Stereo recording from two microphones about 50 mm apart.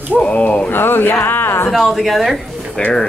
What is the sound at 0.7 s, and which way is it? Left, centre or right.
Speech, left.